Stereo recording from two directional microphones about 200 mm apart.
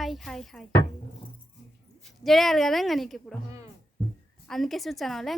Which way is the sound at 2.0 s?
Centre (ahead or behind).